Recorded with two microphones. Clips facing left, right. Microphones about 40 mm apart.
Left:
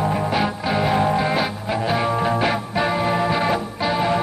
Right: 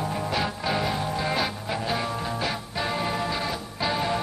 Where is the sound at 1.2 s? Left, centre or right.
Centre.